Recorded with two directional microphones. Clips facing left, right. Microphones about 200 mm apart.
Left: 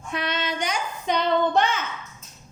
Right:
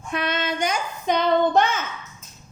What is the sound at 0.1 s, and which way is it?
Child singing, 50° right (ahead or behind).